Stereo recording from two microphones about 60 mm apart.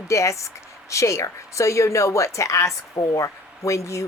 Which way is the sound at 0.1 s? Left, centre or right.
Left.